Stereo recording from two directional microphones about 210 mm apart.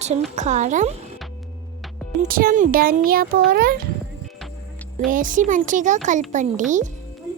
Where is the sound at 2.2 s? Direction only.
40° right (ahead or behind).